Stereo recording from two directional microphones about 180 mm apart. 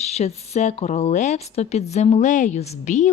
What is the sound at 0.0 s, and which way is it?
A woman's voice, 35° left (ahead or behind).